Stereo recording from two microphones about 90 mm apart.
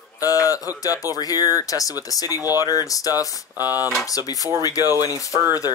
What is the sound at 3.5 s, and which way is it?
Speech, 25° right (ahead or behind).